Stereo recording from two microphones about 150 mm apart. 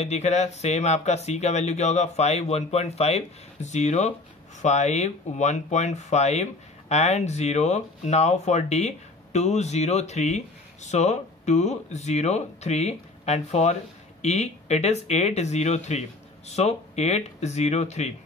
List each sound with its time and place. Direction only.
0.0 s speech: 45° left (ahead or behind)